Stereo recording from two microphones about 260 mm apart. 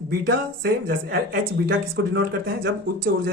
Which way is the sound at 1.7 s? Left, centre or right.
Right.